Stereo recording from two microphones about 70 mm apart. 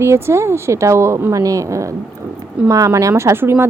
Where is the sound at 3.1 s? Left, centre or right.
Right.